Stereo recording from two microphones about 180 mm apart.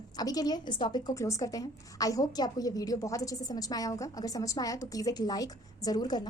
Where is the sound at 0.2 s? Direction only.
20° left (ahead or behind).